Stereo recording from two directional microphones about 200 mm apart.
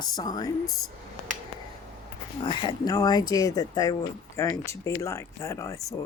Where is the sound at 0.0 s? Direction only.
20° left (ahead or behind).